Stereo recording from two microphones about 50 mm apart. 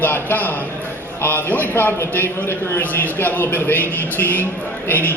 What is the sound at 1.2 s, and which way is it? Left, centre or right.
A man's voice, left.